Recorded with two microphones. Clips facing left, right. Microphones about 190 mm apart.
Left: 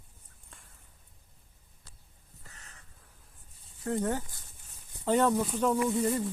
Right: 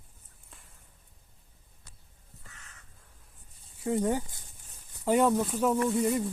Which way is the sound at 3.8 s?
15° right (ahead or behind).